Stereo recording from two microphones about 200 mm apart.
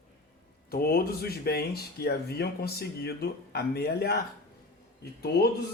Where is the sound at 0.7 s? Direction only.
50° left (ahead or behind).